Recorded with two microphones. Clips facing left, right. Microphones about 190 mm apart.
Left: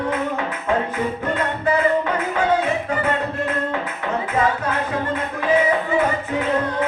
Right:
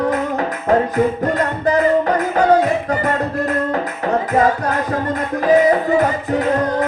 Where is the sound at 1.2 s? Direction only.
40° right (ahead or behind).